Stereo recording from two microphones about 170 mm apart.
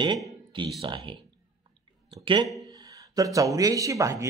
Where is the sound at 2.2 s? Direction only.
25° right (ahead or behind).